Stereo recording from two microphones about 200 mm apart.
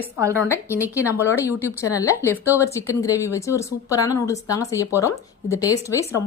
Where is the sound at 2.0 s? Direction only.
15° left (ahead or behind).